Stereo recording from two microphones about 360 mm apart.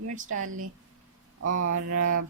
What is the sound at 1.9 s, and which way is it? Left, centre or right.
Speech, right.